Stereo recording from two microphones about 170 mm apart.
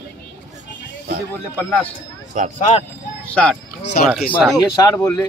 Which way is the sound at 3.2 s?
5° left (ahead or behind).